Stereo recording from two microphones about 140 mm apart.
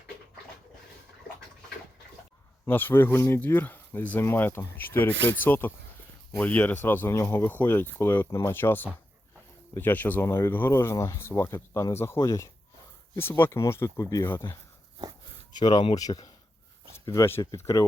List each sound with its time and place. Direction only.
2.6 s speech: 15° left (ahead or behind)
15.5 s speech: 30° left (ahead or behind)